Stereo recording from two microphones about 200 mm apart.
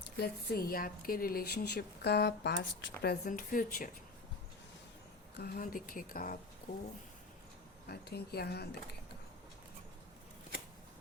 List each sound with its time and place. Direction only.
0.2 s a woman's voice: 50° left (ahead or behind)
5.4 s a woman's voice: 45° left (ahead or behind)
7.9 s a woman's voice: 50° left (ahead or behind)